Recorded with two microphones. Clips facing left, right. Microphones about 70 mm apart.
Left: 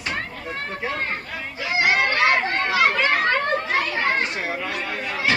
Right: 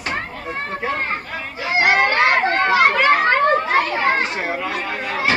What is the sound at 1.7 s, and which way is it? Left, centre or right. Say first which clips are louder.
Children playing: right 4 dB; right.